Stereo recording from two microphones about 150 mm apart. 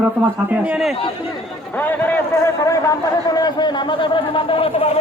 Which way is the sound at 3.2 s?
25° left (ahead or behind).